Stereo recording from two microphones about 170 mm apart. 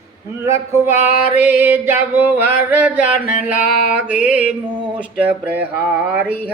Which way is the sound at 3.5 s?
50° left (ahead or behind).